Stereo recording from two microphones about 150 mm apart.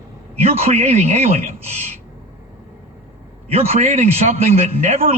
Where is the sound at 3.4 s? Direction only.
45° right (ahead or behind).